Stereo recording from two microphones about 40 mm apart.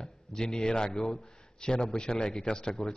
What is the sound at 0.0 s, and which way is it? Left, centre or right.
A man's voice, centre.